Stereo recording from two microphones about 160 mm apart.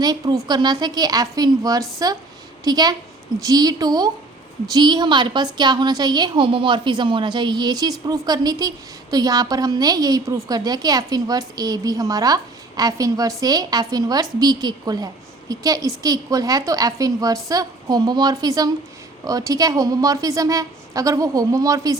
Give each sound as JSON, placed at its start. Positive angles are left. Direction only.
{"t": 0.0, "sound": "a woman's voice", "side_deg": -25}